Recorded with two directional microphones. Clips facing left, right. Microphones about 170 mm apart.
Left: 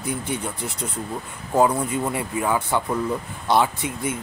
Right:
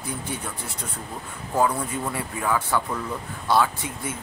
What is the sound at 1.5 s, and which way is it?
Speech, 20° left (ahead or behind).